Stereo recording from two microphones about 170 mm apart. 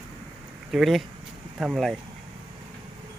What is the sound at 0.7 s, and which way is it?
Speech, centre (ahead or behind).